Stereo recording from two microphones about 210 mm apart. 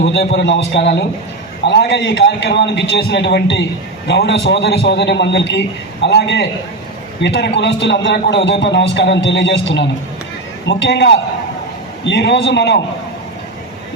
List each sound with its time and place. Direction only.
0.0 s a man's voice: 55° left (ahead or behind)